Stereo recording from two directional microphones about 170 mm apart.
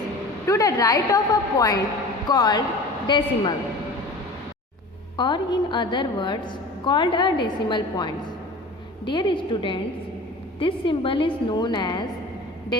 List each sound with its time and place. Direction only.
0.4 s a woman's voice: 20° left (ahead or behind)
5.1 s a woman's voice: 25° left (ahead or behind)